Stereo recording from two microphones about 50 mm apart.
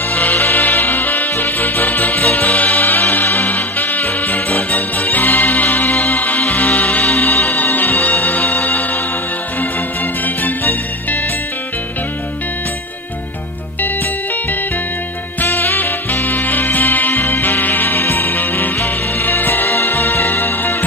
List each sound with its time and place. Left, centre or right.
0.1 s music: left
10.2 s music: left
15.4 s music: left